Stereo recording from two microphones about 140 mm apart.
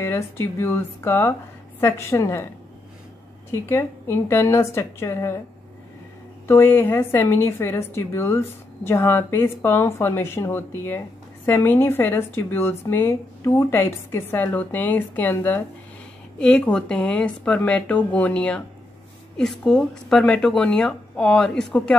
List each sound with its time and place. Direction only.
0.0 s a woman's voice: 20° left (ahead or behind)
3.6 s a woman's voice: 20° left (ahead or behind)
6.4 s a woman's voice: 15° left (ahead or behind)